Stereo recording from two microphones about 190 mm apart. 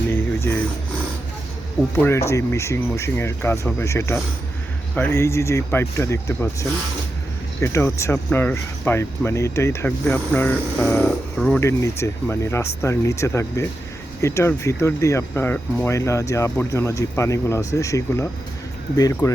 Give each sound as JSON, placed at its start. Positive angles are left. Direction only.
{"t": 0.1, "sound": "a sound", "side_deg": 10}
{"t": 2.0, "sound": "speech", "side_deg": 15}
{"t": 11.6, "sound": "speech", "side_deg": 15}